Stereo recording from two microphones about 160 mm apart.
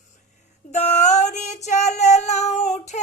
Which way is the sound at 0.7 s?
45° left (ahead or behind).